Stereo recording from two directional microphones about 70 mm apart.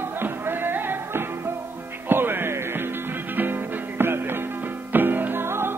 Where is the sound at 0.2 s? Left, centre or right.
Right.